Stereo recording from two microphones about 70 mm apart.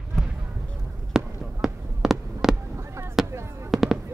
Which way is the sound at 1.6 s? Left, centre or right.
Centre.